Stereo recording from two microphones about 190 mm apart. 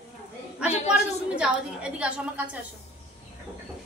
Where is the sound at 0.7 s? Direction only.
35° left (ahead or behind).